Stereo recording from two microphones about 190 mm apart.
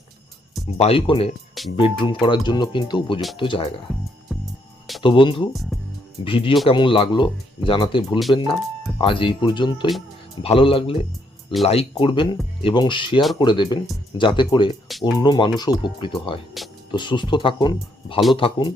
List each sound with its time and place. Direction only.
0.8 s speech: 30° left (ahead or behind)
4.3 s music: centre (ahead or behind)
5.0 s speech: 25° left (ahead or behind)
5.7 s music: centre (ahead or behind)
6.2 s speech: 30° left (ahead or behind)